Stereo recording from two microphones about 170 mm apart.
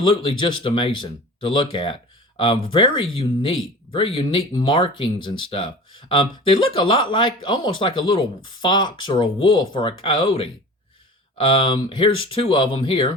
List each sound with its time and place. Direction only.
0.0 s speech: 30° left (ahead or behind)